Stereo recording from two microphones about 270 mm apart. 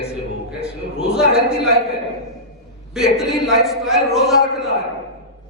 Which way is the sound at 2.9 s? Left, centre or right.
Centre.